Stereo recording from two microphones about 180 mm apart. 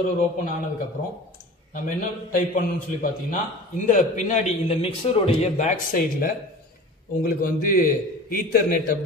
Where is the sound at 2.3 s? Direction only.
50° left (ahead or behind).